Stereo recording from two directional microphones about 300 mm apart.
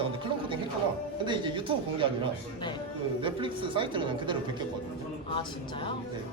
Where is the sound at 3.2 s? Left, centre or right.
Centre.